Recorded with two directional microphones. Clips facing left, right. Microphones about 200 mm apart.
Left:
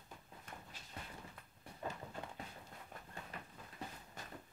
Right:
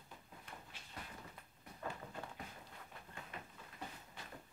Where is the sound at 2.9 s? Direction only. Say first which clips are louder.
Left 2 dB; 45° left (ahead or behind).